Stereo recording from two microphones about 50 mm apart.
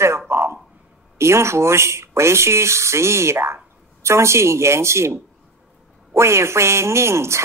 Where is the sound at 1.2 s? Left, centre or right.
Right.